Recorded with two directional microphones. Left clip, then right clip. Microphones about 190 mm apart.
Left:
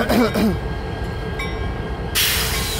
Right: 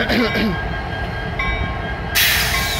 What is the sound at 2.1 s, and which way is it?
Train, 45° right (ahead or behind).